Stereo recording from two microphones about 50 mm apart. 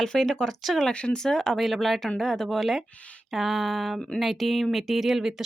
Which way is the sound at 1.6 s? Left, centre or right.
Centre.